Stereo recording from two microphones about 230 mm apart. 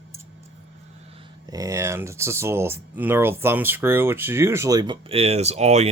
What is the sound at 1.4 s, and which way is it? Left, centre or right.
Speech, centre.